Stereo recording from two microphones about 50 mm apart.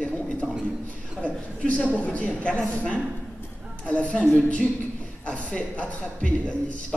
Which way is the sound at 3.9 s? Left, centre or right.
Left.